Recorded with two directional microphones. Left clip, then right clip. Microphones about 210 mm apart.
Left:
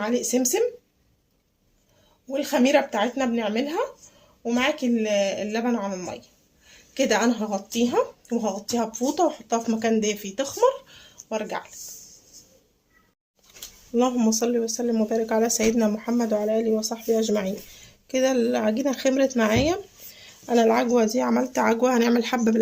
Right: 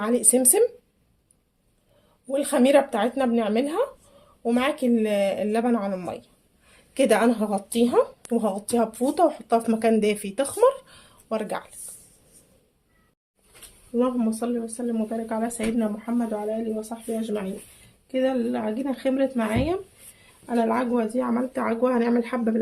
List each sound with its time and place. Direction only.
0.0 s speech: 30° right (ahead or behind)
2.3 s a woman's voice: 30° right (ahead or behind)
13.9 s speech: 50° left (ahead or behind)